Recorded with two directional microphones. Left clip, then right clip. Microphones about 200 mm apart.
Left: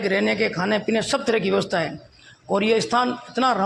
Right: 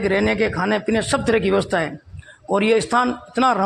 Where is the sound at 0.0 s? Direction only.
40° right (ahead or behind).